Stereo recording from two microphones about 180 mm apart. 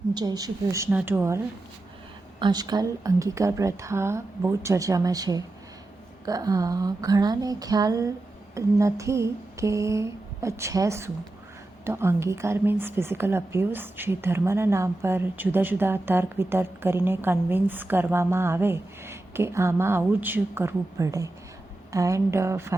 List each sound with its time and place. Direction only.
0.1 s a woman's voice: 25° right (ahead or behind)
2.4 s a woman's voice: 25° right (ahead or behind)